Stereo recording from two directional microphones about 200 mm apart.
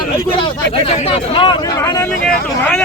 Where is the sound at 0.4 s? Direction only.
30° left (ahead or behind); by 2.0 s 15° left (ahead or behind).